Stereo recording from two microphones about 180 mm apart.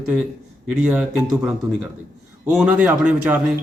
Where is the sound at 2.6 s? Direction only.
5° right (ahead or behind).